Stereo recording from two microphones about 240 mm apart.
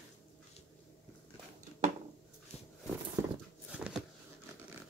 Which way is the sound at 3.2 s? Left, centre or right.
Centre.